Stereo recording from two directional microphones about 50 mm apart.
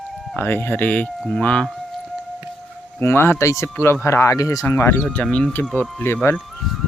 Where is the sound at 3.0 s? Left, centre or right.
Left.